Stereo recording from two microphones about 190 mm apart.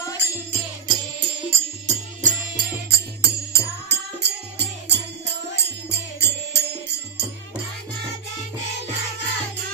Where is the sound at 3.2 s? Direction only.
60° right (ahead or behind).